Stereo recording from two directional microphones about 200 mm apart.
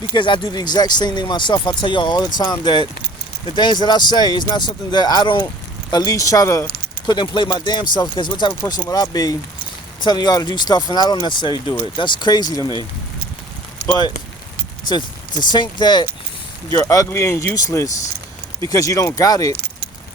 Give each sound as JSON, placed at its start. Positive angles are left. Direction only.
{"t": 0.1, "sound": "speech", "side_deg": 20}
{"t": 14.8, "sound": "speech", "side_deg": 20}